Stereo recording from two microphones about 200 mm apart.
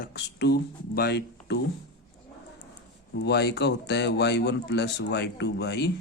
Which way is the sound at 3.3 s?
55° left (ahead or behind).